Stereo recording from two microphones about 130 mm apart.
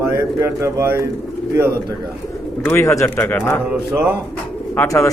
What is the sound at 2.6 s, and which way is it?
Speech, 20° left (ahead or behind).